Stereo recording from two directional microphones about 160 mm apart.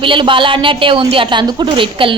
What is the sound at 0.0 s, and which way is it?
A woman's voice, 30° right (ahead or behind).